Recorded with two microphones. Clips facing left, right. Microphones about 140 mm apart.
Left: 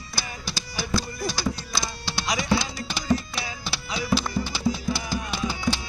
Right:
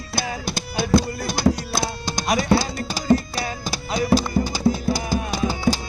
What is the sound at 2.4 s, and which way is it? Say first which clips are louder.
Music: right 5 dB; 40° right (ahead or behind).